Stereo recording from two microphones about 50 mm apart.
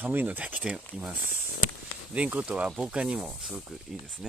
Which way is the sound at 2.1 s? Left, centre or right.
Right.